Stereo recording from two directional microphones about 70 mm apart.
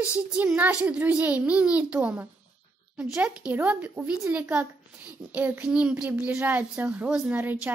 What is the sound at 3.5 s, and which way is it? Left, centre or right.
A child's voice, right.